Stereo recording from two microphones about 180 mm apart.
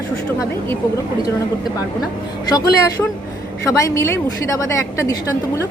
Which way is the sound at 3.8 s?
15° left (ahead or behind).